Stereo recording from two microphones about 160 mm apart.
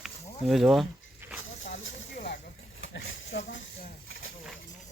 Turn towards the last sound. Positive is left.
turn(degrees=90)